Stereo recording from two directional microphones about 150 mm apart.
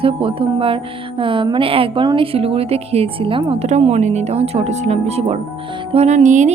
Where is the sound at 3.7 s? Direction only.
45° right (ahead or behind).